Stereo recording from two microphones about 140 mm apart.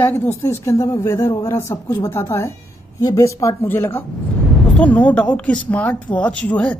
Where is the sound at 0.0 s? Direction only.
15° left (ahead or behind).